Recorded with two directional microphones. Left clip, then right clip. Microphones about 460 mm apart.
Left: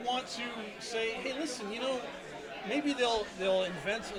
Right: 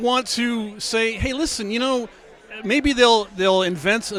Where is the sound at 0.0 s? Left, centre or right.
Right.